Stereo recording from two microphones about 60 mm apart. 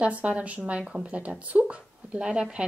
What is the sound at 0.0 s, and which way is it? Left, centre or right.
Speech, right.